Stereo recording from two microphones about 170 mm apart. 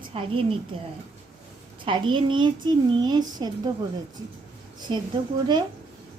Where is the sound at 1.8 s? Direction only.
30° right (ahead or behind).